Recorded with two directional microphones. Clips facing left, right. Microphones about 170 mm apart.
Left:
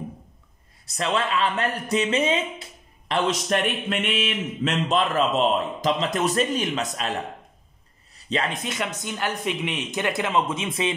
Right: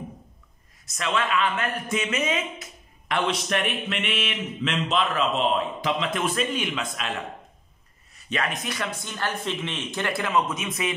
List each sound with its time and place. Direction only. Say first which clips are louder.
0.8 s speech: left 2 dB; 35° left (ahead or behind)
3.3 s a man's voice: left 3 dB; 40° left (ahead or behind)
8.3 s speech: left 2 dB; 25° left (ahead or behind)